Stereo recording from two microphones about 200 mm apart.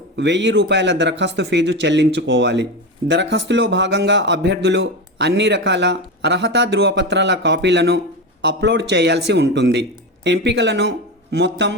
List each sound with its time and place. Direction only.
0.2 s speech: 60° right (ahead or behind)